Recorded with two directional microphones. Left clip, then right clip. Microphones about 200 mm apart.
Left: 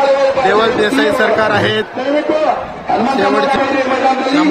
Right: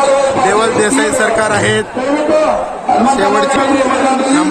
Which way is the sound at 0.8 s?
15° right (ahead or behind).